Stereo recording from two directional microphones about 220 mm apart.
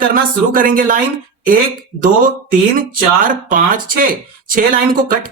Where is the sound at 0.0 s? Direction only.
40° right (ahead or behind).